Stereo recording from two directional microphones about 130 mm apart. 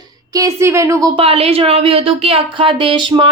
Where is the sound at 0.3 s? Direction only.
20° right (ahead or behind).